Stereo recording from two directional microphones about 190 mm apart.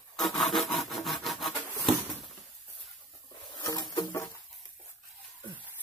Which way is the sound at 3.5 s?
20° left (ahead or behind).